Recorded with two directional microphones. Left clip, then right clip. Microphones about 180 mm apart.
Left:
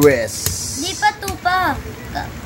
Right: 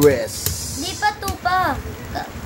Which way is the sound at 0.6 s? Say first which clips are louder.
Left 4 dB; 30° right (ahead or behind).